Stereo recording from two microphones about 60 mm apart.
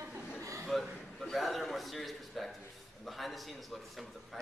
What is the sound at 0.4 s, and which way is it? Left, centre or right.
Chuckle, right.